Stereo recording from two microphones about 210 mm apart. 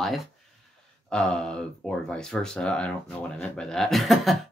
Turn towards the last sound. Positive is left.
turn(degrees=0)  # may be behind; listen again after turning